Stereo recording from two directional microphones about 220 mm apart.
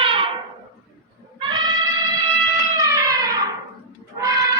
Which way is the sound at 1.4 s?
20° right (ahead or behind).